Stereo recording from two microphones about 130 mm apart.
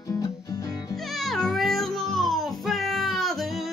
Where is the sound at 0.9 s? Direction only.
Centre (ahead or behind).